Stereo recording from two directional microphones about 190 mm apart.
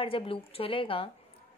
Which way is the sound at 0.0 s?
30° left (ahead or behind).